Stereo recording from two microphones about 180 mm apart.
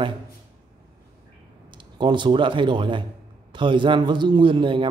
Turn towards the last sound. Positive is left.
turn(degrees=-30)  # may be behind; listen again after turning